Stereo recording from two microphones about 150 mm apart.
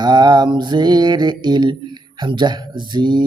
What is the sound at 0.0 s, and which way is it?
Mantra, 30° right (ahead or behind).